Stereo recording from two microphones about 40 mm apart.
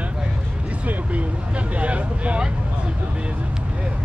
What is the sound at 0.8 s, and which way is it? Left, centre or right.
Speech, right.